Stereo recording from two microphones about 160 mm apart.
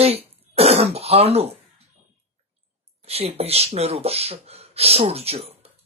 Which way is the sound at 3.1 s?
40° right (ahead or behind).